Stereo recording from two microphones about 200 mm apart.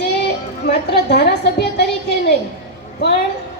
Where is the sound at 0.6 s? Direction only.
55° left (ahead or behind).